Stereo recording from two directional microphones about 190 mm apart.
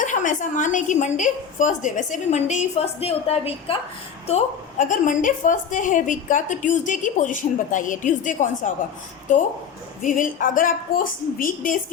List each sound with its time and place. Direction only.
0.0 s a woman's voice: 40° left (ahead or behind)
10.0 s a woman's voice: 45° left (ahead or behind)